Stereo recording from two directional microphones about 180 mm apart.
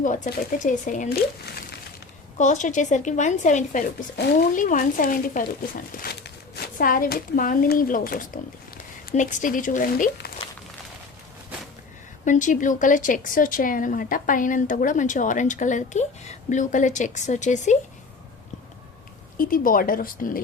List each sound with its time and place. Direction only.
0.0 s speech: 45° left (ahead or behind)
2.4 s speech: 45° left (ahead or behind)
12.2 s speech: 45° left (ahead or behind)
19.4 s speech: 50° left (ahead or behind)